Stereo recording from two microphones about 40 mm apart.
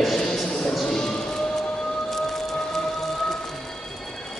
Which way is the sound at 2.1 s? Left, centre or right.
Centre.